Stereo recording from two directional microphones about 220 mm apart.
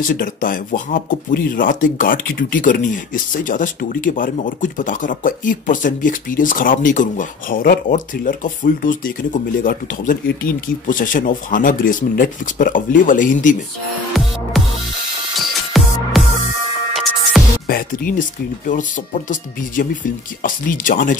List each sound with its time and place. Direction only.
0.0 s speech: 40° left (ahead or behind)
14.5 s music: centre (ahead or behind)
17.6 s music: 40° left (ahead or behind)
18.7 s speech: 35° left (ahead or behind)